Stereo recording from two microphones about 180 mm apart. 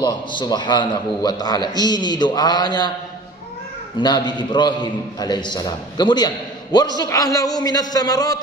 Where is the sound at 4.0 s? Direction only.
25° left (ahead or behind).